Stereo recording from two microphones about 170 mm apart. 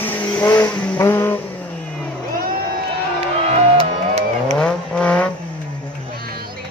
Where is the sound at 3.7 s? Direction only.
40° right (ahead or behind).